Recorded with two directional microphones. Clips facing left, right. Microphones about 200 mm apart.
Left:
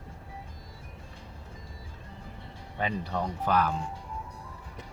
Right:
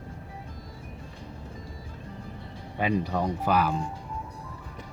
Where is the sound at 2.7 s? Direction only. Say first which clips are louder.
Right 5 dB; 10° right (ahead or behind).